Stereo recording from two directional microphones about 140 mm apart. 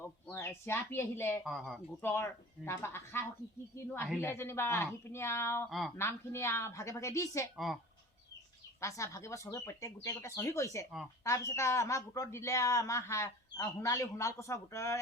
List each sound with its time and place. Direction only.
0.3 s speech: 15° left (ahead or behind)
1.5 s speech: centre (ahead or behind)
2.0 s speech: 15° left (ahead or behind)
7.5 s speech: centre (ahead or behind)
8.8 s speech: 20° left (ahead or behind)